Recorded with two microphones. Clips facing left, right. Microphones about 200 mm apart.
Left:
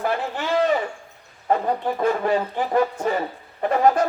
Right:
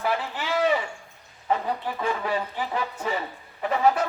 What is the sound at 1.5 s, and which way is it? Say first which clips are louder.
Speech: left 5 dB; 50° left (ahead or behind).